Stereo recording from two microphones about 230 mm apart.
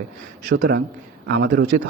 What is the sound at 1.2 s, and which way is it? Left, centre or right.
Speech, right.